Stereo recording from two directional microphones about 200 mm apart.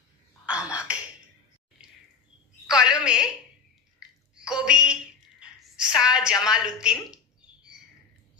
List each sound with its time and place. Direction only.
0.5 s throat clearing: 5° right (ahead or behind)
2.7 s telephone: 5° right (ahead or behind)
4.4 s a sound: 5° right (ahead or behind)
6.3 s speech: 20° left (ahead or behind)
6.6 s speech: 5° right (ahead or behind)